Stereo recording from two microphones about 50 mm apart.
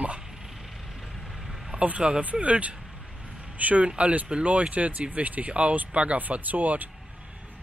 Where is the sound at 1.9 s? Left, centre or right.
Right.